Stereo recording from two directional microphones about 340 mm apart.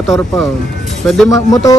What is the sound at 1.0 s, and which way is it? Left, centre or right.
Speech, centre.